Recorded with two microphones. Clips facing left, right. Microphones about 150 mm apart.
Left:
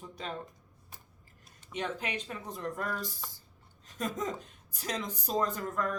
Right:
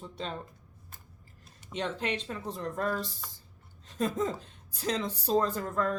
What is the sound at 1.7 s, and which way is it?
A man's voice, 30° right (ahead or behind).